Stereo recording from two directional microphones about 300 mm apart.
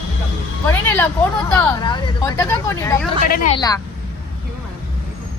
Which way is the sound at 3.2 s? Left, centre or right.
Left.